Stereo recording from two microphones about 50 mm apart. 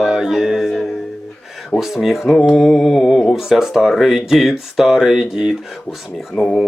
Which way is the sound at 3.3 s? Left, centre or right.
Centre.